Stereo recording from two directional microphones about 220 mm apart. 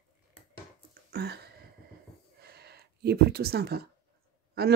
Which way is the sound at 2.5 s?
45° right (ahead or behind).